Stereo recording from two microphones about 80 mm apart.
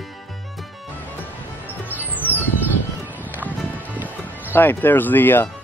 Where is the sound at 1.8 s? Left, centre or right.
Right.